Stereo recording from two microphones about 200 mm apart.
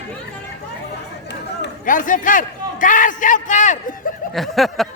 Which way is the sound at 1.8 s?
40° left (ahead or behind).